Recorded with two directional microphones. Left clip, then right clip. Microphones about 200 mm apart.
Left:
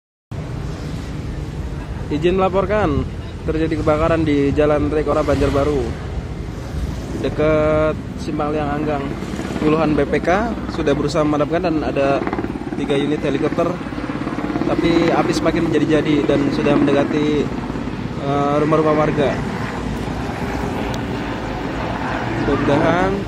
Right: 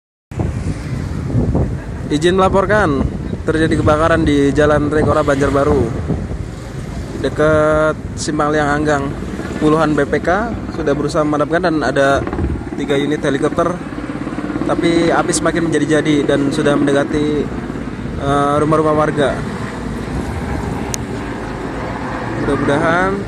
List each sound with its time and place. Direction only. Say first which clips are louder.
2.1 s a man's voice: right 4 dB; 25° right (ahead or behind)
7.2 s speech: right 4 dB; 15° right (ahead or behind)
8.4 s a man's voice: right 6 dB; 25° right (ahead or behind); by 11.6 s 5° right (ahead or behind)
11.6 s a man's voice: right 4 dB; 20° right (ahead or behind)
12.8 s speech: right 3 dB; 5° right (ahead or behind)
22.7 s speech: right 2 dB; 5° right (ahead or behind)